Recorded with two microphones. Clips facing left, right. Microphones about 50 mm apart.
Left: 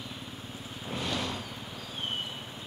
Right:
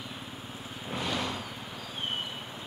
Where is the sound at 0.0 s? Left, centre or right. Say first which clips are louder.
Right 1 dB; centre.